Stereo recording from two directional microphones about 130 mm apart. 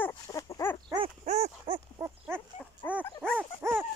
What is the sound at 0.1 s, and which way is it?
Dog, 25° left (ahead or behind).